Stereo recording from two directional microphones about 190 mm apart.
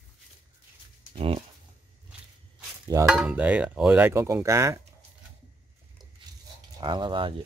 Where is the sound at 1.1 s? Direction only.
30° right (ahead or behind).